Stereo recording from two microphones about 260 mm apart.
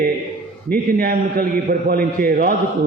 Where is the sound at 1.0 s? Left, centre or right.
Right.